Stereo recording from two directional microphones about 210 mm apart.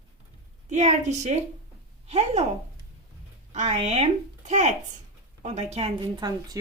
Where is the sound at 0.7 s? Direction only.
35° right (ahead or behind).